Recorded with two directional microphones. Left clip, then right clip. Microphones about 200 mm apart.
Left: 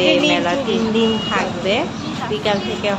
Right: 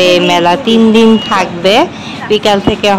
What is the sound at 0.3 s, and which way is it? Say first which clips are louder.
A woman's voice: right 9 dB; 60° right (ahead or behind).